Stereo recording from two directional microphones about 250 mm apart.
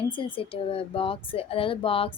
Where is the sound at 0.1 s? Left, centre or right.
Centre.